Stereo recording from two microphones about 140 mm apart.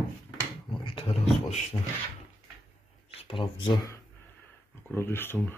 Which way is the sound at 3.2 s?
40° left (ahead or behind).